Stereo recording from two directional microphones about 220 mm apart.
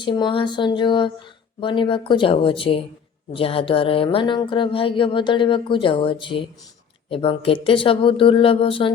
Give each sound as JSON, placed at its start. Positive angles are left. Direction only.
{"t": 0.0, "sound": "speech", "side_deg": 20}